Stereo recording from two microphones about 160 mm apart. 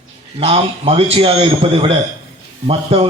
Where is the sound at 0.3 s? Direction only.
35° right (ahead or behind).